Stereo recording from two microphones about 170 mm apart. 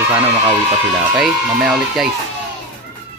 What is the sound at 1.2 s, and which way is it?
Speech, 5° right (ahead or behind).